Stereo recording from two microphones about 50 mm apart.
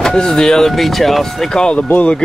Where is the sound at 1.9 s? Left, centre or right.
Left.